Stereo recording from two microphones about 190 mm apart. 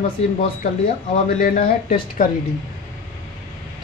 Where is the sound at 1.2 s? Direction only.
45° left (ahead or behind).